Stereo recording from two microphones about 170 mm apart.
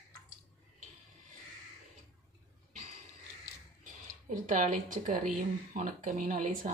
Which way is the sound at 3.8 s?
50° right (ahead or behind).